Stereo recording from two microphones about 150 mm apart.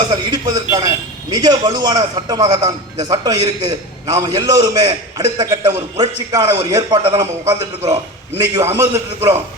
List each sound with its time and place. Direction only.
0.1 s a man's voice: 25° right (ahead or behind)
8.4 s a man's voice: 25° right (ahead or behind)